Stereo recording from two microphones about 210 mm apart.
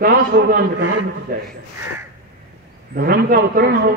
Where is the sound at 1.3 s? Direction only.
40° right (ahead or behind).